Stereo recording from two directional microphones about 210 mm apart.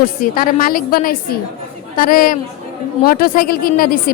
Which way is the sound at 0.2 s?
40° left (ahead or behind).